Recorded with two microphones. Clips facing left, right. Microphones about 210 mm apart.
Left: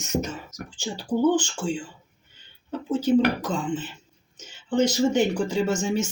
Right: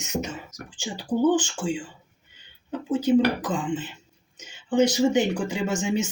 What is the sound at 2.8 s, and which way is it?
Speech, 15° right (ahead or behind).